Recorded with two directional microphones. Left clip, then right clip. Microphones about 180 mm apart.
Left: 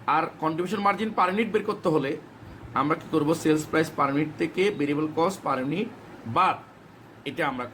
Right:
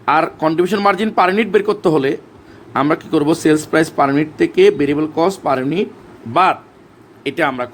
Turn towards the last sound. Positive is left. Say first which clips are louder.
# right 11 dB
turn(degrees=-50)  # may be behind; listen again after turning